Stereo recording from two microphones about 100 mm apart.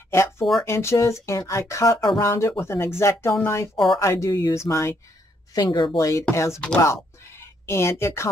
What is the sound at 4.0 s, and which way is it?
Speech, 30° left (ahead or behind).